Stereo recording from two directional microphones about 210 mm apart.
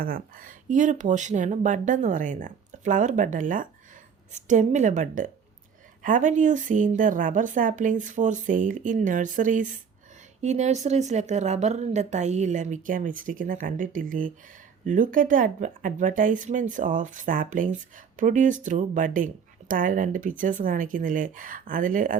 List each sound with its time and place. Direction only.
0.0 s speech: 40° right (ahead or behind)